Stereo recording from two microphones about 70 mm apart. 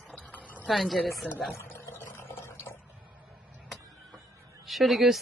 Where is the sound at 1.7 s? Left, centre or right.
Left.